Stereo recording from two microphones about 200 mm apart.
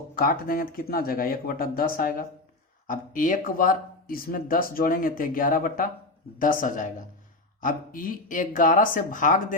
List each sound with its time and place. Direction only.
0.2 s speech: 45° left (ahead or behind)